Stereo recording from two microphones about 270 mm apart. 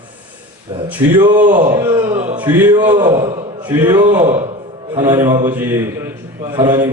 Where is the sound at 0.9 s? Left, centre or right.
Centre.